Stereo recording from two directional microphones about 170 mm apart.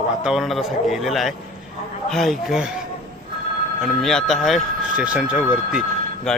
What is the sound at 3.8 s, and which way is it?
Speech, centre (ahead or behind).